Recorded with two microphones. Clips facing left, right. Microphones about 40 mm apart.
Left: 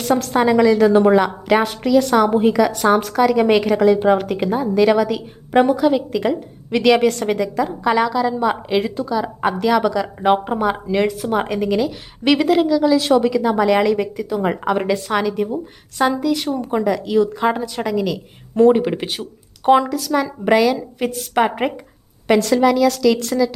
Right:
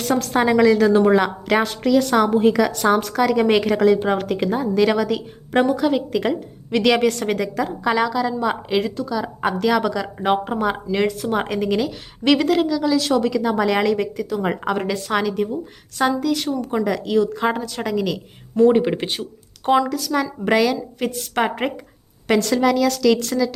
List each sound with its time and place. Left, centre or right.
0.0 s a woman's voice: centre
13.0 s a woman's voice: left
13.2 s a woman's voice: centre
19.6 s a woman's voice: centre
19.9 s a woman's voice: centre